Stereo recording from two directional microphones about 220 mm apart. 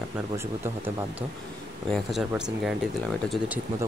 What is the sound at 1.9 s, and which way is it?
Speech, centre (ahead or behind).